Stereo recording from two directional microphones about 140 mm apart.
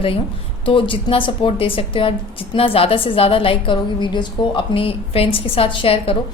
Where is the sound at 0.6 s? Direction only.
40° left (ahead or behind).